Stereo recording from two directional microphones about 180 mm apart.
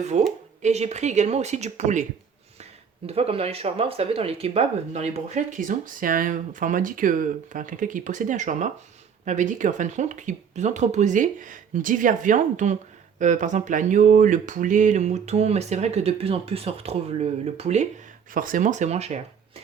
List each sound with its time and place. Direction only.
0.0 s speech: 40° right (ahead or behind)
3.1 s speech: 35° right (ahead or behind)
18.3 s speech: 50° right (ahead or behind)